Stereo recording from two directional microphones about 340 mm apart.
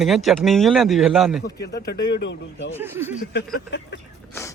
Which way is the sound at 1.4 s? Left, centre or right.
Left.